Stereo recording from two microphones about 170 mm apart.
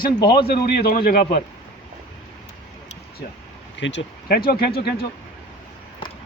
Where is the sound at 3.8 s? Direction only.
90° left; by 5.0 s 65° left (ahead or behind).